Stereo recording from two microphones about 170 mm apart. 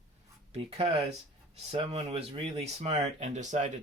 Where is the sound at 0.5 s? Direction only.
35° right (ahead or behind).